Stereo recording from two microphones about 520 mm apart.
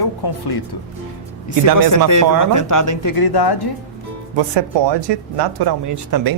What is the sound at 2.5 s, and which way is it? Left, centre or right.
Speech, left.